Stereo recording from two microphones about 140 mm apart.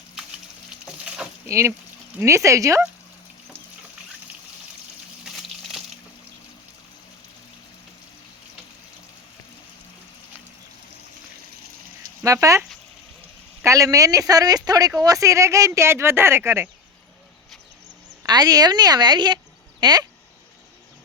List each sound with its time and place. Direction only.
1.5 s speech: 20° right (ahead or behind)
12.2 s speech: 25° right (ahead or behind)
13.7 s speech: 25° right (ahead or behind)
18.3 s speech: 30° right (ahead or behind)